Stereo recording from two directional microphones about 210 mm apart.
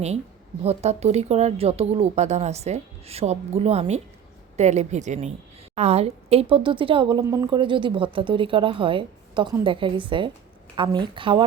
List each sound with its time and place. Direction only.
0.6 s speech: 30° right (ahead or behind)